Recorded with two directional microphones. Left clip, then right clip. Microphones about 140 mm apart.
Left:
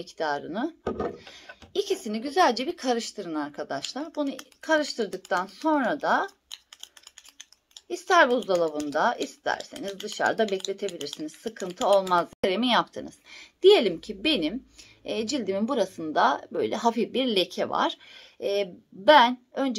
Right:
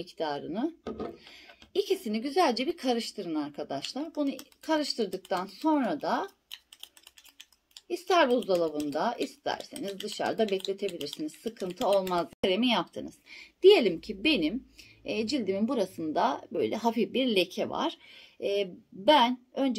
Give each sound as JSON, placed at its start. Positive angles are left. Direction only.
{"t": 0.0, "sound": "speech", "side_deg": -10}
{"t": 1.2, "sound": "a sound", "side_deg": -10}
{"t": 2.0, "sound": "speech", "side_deg": -10}
{"t": 7.9, "sound": "speech", "side_deg": -10}
{"t": 11.0, "sound": "speech", "side_deg": 50}
{"t": 11.5, "sound": "speech", "side_deg": -5}